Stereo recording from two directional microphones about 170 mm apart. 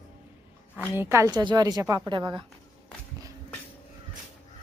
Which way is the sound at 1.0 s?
15° right (ahead or behind).